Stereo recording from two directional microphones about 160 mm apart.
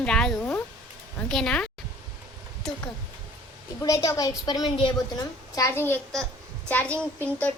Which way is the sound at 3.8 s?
20° left (ahead or behind).